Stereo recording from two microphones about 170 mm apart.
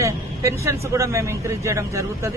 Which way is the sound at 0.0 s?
15° right (ahead or behind).